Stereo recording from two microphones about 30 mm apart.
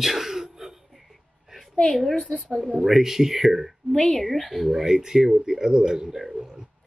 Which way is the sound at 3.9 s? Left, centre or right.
Centre.